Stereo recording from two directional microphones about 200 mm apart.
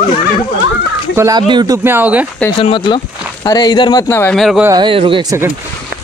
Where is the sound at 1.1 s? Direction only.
15° right (ahead or behind).